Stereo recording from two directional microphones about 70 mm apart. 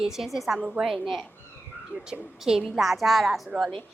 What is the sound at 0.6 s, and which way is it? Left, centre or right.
Speech, centre.